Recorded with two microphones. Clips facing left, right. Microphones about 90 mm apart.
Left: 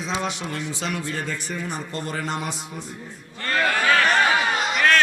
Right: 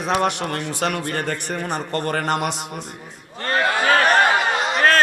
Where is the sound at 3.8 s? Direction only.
50° right (ahead or behind).